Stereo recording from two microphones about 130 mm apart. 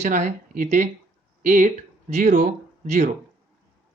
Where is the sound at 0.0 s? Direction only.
70° right (ahead or behind).